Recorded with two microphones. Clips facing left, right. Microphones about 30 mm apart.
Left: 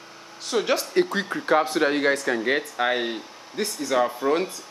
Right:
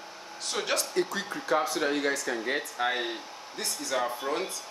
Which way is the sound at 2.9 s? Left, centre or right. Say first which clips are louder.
Left 5 dB; centre.